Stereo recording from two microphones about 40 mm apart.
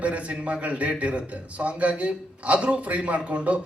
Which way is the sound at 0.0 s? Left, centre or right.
Right.